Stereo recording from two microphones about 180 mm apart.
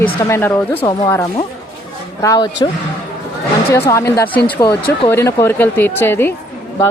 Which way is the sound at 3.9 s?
15° left (ahead or behind).